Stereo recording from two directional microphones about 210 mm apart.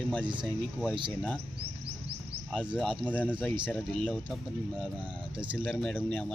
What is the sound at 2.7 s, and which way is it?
Speech, centre (ahead or behind).